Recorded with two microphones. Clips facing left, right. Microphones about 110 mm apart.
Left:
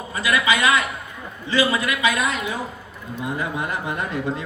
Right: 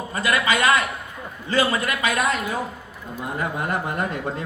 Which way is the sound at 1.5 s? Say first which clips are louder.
Left 1 dB; 45° right (ahead or behind).